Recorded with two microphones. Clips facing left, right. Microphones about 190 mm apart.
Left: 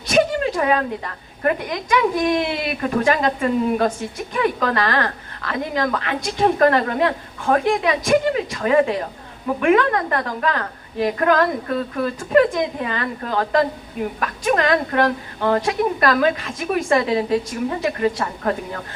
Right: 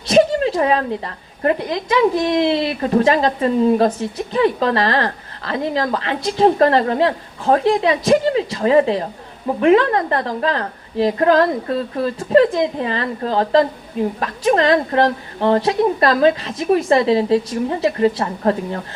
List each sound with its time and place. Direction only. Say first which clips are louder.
0.1 s a woman's voice: right 4 dB; 30° right (ahead or behind)